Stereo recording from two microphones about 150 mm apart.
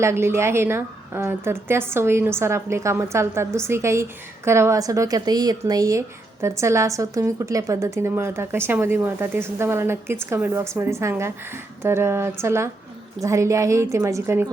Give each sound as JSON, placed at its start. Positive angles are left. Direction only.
{"t": 0.0, "sound": "a woman's voice", "side_deg": -15}